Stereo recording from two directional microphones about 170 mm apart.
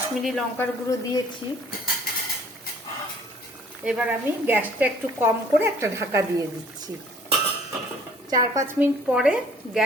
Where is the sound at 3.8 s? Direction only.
5° right (ahead or behind).